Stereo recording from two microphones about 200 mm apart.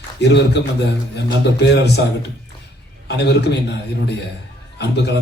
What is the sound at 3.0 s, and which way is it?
A man's voice, 60° left (ahead or behind).